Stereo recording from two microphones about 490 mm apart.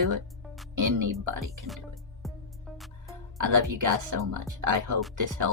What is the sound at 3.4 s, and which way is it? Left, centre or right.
Speech, right.